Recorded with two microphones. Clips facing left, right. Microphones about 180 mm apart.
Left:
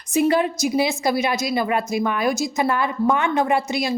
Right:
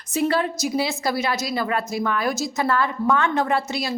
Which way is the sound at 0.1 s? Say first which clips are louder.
Left 3 dB; 15° left (ahead or behind).